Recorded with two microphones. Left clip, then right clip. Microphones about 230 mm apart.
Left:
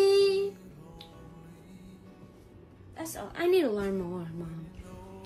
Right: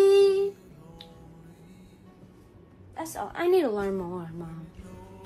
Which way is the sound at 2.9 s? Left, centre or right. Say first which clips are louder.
Right 5 dB; centre.